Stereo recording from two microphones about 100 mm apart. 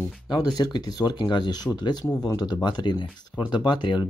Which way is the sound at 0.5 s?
45° left (ahead or behind).